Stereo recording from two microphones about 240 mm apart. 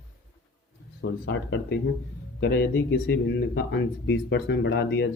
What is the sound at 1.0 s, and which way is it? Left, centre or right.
Speech, left.